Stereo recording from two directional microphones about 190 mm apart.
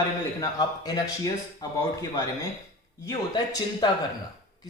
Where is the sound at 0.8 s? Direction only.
20° left (ahead or behind).